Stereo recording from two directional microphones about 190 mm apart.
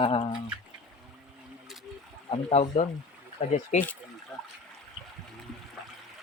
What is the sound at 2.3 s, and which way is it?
Speech, 30° left (ahead or behind).